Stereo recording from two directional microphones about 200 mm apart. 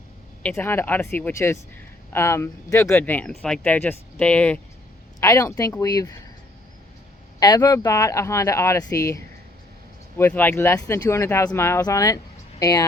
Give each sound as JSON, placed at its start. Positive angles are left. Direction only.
{"t": 0.4, "sound": "speech", "side_deg": 10}
{"t": 7.3, "sound": "speech", "side_deg": 20}